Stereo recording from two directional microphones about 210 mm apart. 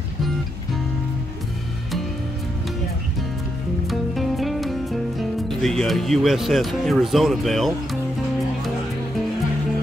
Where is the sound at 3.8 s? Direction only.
Centre (ahead or behind).